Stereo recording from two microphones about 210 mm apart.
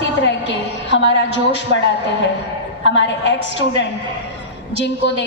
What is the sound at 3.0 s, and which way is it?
A woman's voice, 60° left (ahead or behind).